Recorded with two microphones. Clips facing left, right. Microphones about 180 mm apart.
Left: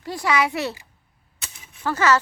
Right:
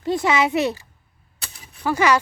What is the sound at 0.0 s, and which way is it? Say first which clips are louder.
Speech: right 3 dB; 25° right (ahead or behind).